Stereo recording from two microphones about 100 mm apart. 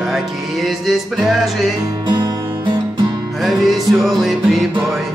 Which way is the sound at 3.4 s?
Centre (ahead or behind).